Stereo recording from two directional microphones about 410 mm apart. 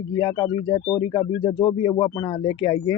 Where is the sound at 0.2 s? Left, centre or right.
Centre.